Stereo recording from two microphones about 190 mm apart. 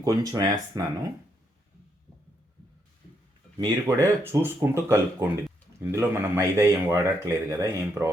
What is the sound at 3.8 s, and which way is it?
Speech, 15° right (ahead or behind).